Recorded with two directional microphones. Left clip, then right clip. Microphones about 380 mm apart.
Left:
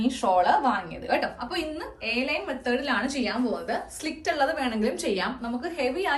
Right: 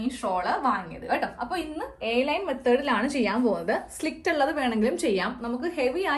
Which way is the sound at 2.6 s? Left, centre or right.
Centre.